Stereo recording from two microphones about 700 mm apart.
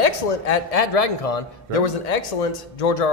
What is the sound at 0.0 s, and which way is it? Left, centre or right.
Speech, left.